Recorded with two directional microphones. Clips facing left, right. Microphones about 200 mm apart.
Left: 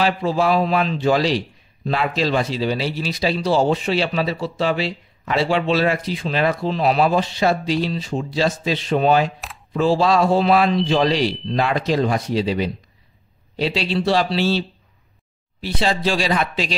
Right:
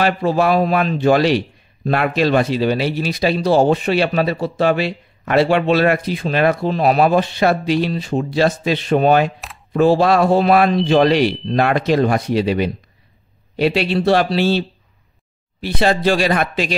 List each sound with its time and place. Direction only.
0.0 s speech: 60° right (ahead or behind)
15.6 s speech: 55° right (ahead or behind)